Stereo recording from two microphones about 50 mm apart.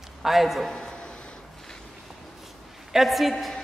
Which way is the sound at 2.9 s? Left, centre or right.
Centre.